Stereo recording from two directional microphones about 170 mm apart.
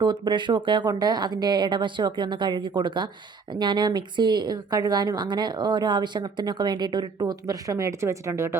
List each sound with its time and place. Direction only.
0.0 s speech: 25° right (ahead or behind)